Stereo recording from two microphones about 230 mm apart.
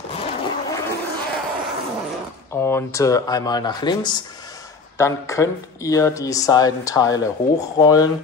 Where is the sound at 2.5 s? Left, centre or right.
Centre.